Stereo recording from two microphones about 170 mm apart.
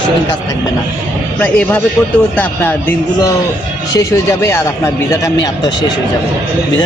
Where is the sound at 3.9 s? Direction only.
15° left (ahead or behind).